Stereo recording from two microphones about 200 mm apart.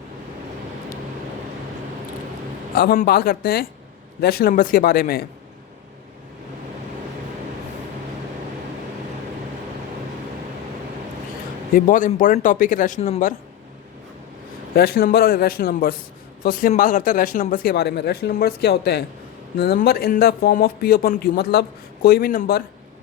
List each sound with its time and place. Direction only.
2.7 s speech: 50° left (ahead or behind)
11.7 s speech: 40° left (ahead or behind)
14.8 s speech: 50° left (ahead or behind)